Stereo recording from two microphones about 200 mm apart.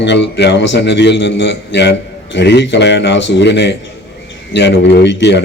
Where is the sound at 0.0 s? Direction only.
60° left (ahead or behind).